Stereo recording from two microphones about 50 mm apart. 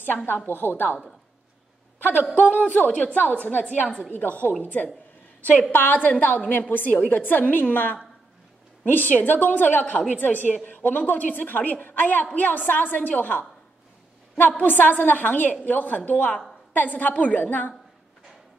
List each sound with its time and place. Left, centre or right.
0.0 s a woman's voice: left
2.0 s a woman's voice: left
5.7 s a woman's voice: left
14.6 s a woman's voice: left